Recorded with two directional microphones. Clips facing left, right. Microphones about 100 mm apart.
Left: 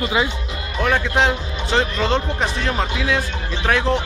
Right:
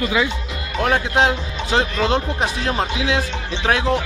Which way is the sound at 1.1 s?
15° right (ahead or behind).